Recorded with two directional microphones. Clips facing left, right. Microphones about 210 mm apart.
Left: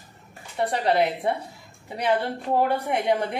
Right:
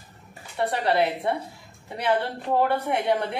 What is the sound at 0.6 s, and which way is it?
Speech, 15° left (ahead or behind).